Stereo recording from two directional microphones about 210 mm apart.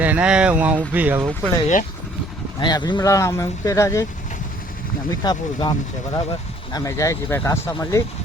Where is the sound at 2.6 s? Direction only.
20° left (ahead or behind).